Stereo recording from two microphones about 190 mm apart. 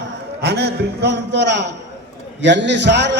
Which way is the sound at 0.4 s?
60° right (ahead or behind).